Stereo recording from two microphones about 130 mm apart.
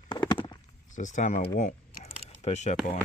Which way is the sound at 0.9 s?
75° left (ahead or behind).